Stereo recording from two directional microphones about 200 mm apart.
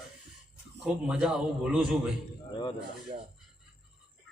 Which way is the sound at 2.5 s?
25° left (ahead or behind).